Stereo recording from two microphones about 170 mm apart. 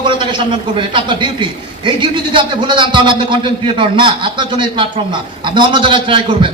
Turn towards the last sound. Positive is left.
turn(degrees=-30)  # may be behind; listen again after turning